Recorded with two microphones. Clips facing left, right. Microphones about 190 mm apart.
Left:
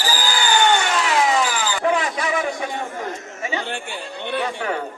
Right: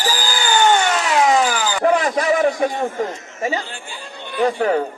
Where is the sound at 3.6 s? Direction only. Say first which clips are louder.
Left 5 dB; 65° left (ahead or behind).